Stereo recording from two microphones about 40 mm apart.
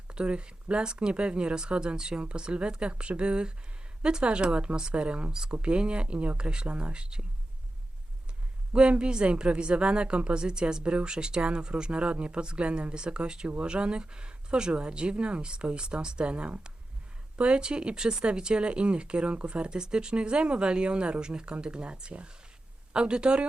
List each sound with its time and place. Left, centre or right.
0.1 s speech: right
8.7 s speech: right